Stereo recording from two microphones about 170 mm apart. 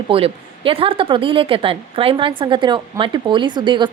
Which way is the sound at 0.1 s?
35° right (ahead or behind).